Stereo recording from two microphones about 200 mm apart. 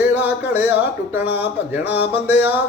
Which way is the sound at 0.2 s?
10° right (ahead or behind).